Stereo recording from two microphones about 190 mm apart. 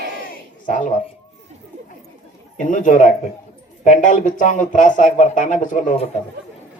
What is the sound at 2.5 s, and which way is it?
A man's voice, 40° left (ahead or behind).